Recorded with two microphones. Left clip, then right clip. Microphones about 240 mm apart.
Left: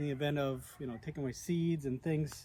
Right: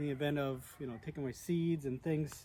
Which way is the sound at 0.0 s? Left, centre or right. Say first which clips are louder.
Left 1 dB; centre.